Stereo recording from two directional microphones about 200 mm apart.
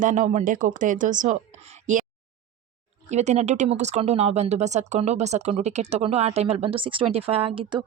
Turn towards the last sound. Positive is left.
turn(degrees=-25)  # may be behind; listen again after turning